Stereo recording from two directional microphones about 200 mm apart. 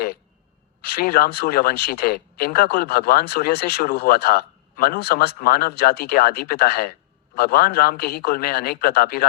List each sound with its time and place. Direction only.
0.9 s speech: 50° left (ahead or behind)